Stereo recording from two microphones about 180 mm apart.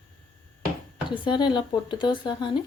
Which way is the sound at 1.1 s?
25° left (ahead or behind).